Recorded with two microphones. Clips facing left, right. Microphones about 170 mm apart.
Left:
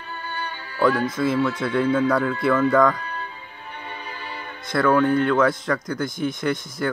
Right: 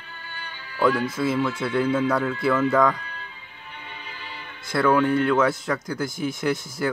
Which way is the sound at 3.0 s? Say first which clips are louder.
Left 8 dB; 45° left (ahead or behind).